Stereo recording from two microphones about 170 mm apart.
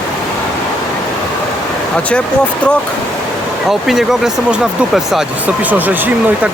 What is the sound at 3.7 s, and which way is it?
Speech, centre (ahead or behind).